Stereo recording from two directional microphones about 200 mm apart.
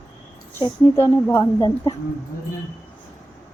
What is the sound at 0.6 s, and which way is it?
A woman's voice, 15° left (ahead or behind).